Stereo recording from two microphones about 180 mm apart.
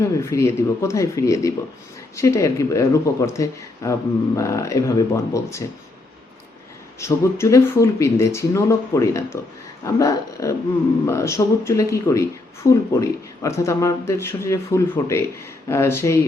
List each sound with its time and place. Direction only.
0.0 s speech: 15° left (ahead or behind)
7.0 s speech: 15° left (ahead or behind)